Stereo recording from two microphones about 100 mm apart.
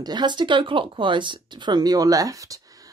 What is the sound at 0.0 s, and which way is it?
Speech, 45° right (ahead or behind).